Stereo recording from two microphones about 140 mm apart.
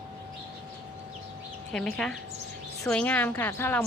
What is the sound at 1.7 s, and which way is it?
Speech, 5° left (ahead or behind).